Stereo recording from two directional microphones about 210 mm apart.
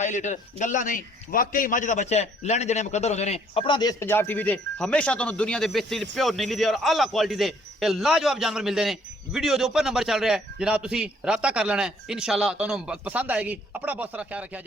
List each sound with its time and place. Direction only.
0.0 s a man's voice: 35° left (ahead or behind); by 14.6 s 5° right (ahead or behind)